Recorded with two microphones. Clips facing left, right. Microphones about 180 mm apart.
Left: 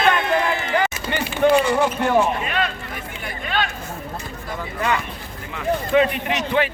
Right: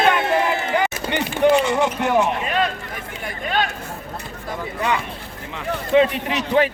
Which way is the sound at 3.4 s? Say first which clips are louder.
Right 2 dB; 45° right (ahead or behind).